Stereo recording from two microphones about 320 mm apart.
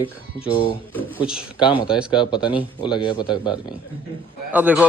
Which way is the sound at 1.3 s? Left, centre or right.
Centre.